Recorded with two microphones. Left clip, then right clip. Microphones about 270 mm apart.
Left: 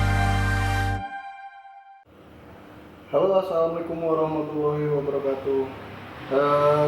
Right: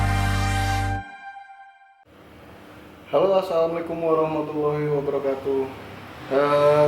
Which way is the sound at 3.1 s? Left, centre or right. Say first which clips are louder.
Right 1 dB; centre.